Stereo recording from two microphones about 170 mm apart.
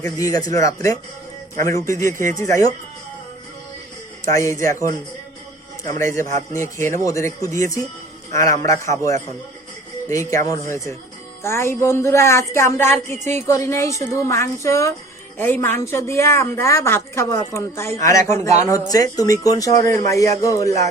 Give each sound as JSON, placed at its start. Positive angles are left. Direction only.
{"t": 0.0, "sound": "speech", "side_deg": 20}
{"t": 4.3, "sound": "speech", "side_deg": 15}
{"t": 6.0, "sound": "a man's voice", "side_deg": 15}